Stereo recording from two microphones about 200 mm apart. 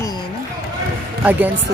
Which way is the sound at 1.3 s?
10° right (ahead or behind).